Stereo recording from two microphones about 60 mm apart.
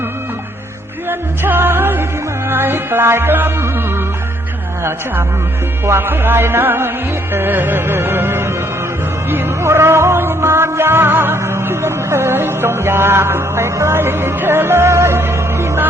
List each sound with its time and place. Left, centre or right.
1.5 s music: right
5.8 s music: right